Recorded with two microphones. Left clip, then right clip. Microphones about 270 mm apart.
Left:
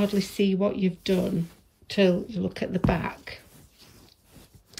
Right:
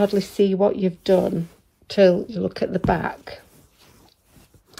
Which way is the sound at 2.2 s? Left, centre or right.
Right.